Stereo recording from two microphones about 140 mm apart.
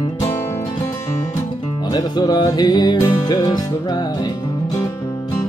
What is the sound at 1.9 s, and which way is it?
Music, 30° left (ahead or behind).